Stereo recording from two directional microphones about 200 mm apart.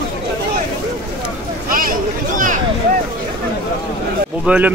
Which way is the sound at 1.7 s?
45° right (ahead or behind).